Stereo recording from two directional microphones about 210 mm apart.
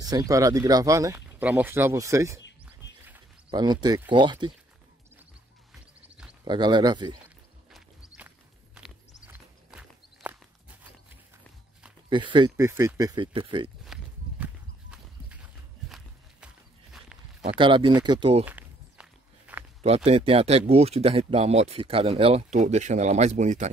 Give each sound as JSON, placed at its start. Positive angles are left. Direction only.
{"t": 0.0, "sound": "speech", "side_deg": -15}
{"t": 3.4, "sound": "speech", "side_deg": -20}
{"t": 5.7, "sound": "music", "side_deg": -5}
{"t": 6.4, "sound": "speech", "side_deg": -20}
{"t": 9.3, "sound": "horse", "side_deg": -5}
{"t": 12.1, "sound": "speech", "side_deg": -20}
{"t": 14.4, "sound": "horse", "side_deg": -5}
{"t": 17.6, "sound": "speech", "side_deg": -25}
{"t": 18.4, "sound": "walk", "side_deg": -10}
{"t": 19.8, "sound": "speech", "side_deg": -30}